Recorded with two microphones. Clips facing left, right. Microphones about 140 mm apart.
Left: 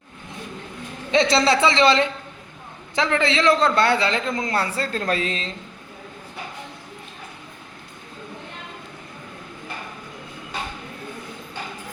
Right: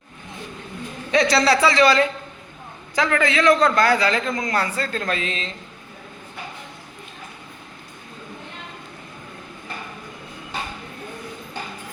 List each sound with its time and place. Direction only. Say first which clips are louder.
1.1 s a woman's voice: even; 25° left (ahead or behind)